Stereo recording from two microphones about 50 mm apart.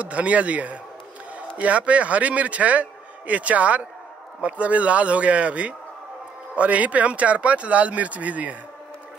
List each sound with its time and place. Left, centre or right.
0.1 s a man's voice: right